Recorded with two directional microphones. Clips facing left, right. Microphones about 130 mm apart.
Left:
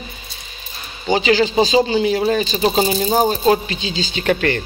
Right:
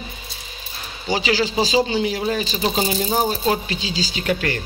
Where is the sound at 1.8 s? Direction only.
50° left (ahead or behind).